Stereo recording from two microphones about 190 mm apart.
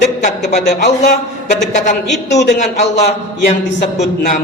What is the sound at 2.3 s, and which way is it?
Speech, 35° left (ahead or behind).